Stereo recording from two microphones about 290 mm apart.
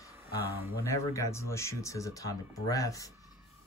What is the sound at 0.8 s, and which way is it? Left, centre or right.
Speech, centre.